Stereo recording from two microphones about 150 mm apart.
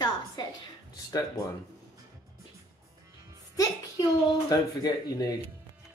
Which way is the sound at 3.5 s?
25° left (ahead or behind).